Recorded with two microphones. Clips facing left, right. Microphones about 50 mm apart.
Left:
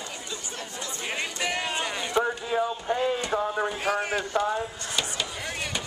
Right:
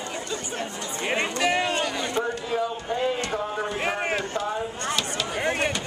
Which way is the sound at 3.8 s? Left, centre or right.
Right.